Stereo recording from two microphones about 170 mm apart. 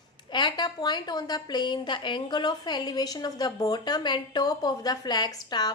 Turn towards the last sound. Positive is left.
turn(degrees=25)  # may be behind; listen again after turning